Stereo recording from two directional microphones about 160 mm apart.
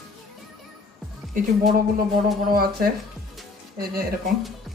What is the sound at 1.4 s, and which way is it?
Speech, 65° right (ahead or behind).